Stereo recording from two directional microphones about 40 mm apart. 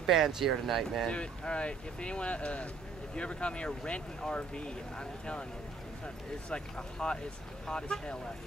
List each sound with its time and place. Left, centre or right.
0.0 s speech: centre
1.0 s speech: left
6.5 s speech: left